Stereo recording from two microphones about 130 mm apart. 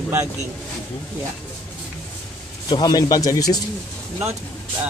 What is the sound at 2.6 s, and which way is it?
Speech, 35° left (ahead or behind).